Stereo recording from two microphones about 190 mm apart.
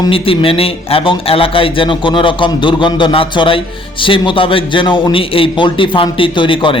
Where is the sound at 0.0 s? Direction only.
30° left (ahead or behind).